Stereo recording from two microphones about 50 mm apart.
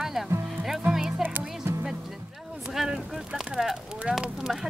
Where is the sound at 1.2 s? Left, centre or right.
Right.